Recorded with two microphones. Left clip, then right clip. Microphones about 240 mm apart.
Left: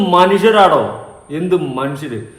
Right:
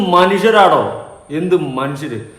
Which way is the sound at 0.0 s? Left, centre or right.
Centre.